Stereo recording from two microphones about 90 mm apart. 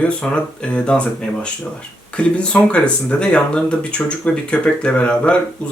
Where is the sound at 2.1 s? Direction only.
10° left (ahead or behind).